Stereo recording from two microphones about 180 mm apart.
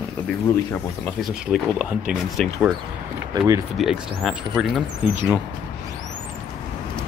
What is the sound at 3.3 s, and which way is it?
Speech, 20° right (ahead or behind).